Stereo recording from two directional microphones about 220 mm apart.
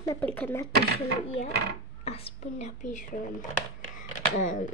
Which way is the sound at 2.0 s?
30° left (ahead or behind).